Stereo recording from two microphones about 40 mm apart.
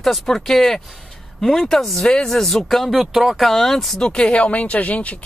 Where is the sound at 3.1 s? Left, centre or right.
Centre.